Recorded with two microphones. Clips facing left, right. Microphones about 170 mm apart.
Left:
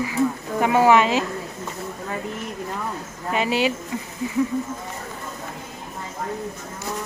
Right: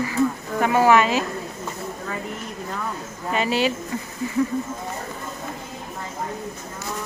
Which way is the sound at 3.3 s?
15° left (ahead or behind).